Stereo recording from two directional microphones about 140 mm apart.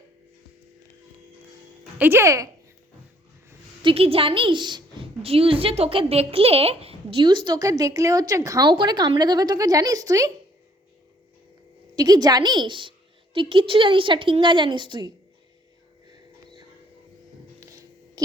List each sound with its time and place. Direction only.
2.0 s a woman's voice: 15° right (ahead or behind)
3.8 s a woman's voice: 45° right (ahead or behind)
5.2 s a woman's voice: 45° right (ahead or behind); by 10.3 s 25° right (ahead or behind)
11.9 s a woman's voice: 30° right (ahead or behind)
16.1 s a sound: 30° right (ahead or behind)